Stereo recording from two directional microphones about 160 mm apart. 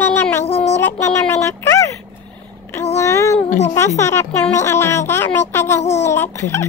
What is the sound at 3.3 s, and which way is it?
Speech, 45° left (ahead or behind).